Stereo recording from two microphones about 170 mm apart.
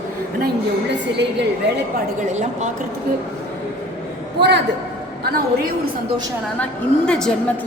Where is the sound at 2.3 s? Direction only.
45° right (ahead or behind).